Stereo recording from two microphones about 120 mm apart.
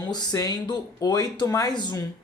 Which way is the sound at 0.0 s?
35° left (ahead or behind).